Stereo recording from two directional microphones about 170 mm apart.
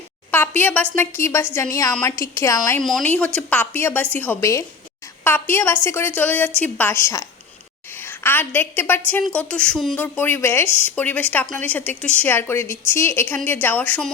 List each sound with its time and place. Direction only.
0.3 s a woman's voice: 10° left (ahead or behind)
2.8 s a woman's voice: 5° left (ahead or behind)